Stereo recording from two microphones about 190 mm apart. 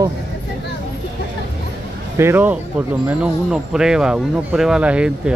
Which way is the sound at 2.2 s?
10° right (ahead or behind).